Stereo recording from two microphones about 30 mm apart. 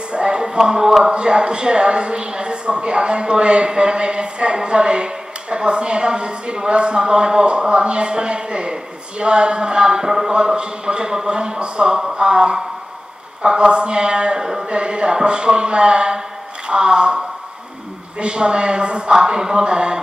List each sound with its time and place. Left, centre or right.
0.1 s a sound: right
1.1 s a woman's voice: right
10.0 s speech: centre
10.3 s a woman's voice: right
12.0 s a woman's voice: right
14.4 s speech: centre
14.7 s a woman's voice: right
18.2 s a woman's voice: right
19.1 s speech: right